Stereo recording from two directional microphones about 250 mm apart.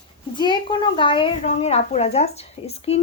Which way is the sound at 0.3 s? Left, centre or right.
Centre.